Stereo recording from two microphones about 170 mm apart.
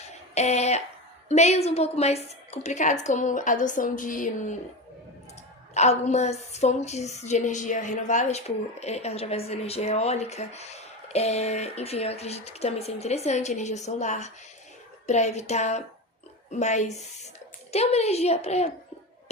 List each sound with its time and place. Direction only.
0.3 s a woman's voice: 40° left (ahead or behind)
5.7 s a woman's voice: 40° left (ahead or behind)